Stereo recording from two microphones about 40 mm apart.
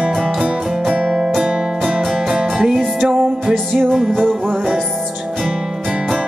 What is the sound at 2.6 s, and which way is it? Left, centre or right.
Music, centre.